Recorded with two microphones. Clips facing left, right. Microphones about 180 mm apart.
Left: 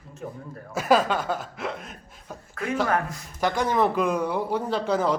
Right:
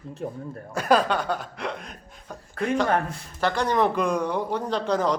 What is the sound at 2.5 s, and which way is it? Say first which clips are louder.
Speech: right 2 dB; 30° right (ahead or behind).